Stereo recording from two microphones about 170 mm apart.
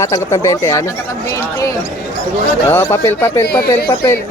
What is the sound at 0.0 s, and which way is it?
Speech, 20° left (ahead or behind).